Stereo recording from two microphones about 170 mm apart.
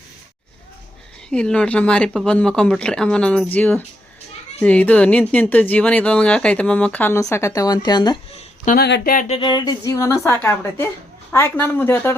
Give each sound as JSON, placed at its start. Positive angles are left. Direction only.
{"t": 1.3, "sound": "speech", "side_deg": 5}
{"t": 8.4, "sound": "a sound", "side_deg": 50}
{"t": 8.8, "sound": "speech", "side_deg": 75}
{"t": 9.1, "sound": "a woman's voice", "side_deg": 40}